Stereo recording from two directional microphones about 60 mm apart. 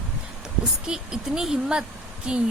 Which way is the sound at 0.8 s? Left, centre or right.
Centre.